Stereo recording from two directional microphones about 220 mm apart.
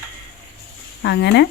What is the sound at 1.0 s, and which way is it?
Speech, 50° left (ahead or behind).